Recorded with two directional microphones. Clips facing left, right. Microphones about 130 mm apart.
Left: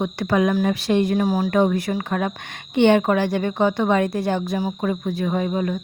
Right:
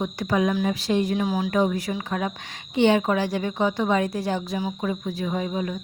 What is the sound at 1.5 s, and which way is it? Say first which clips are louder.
A woman's voice: left 4 dB; 60° left (ahead or behind).